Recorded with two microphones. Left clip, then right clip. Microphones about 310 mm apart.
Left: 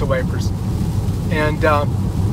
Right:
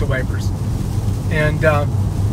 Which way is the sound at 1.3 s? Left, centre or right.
Centre.